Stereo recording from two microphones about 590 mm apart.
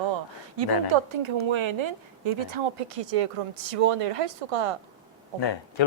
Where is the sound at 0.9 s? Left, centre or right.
Right.